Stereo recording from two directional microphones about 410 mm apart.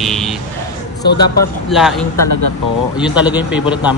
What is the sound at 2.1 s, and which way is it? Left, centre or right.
Speech, left.